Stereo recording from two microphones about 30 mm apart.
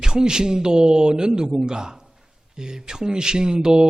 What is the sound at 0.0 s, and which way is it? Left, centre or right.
A man's voice, right.